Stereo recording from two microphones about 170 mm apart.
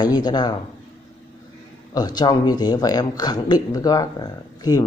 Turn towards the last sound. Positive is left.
turn(degrees=20)  # may be behind; listen again after turning